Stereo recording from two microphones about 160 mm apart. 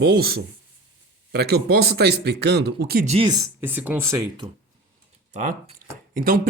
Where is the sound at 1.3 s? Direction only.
85° right.